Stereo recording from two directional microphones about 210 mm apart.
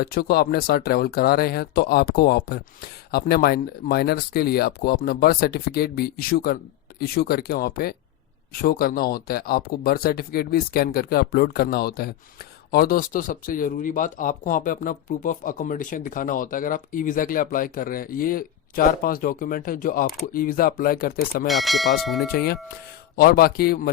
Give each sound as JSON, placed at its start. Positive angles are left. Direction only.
{"t": 0.0, "sound": "speech", "side_deg": 45}
{"t": 21.4, "sound": "speech", "side_deg": 0}
{"t": 22.3, "sound": "speech", "side_deg": 50}